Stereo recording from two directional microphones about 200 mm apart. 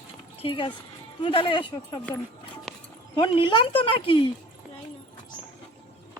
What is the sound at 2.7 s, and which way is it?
Horse, centre (ahead or behind).